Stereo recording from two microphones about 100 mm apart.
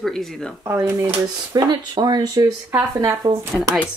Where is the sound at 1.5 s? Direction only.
40° right (ahead or behind).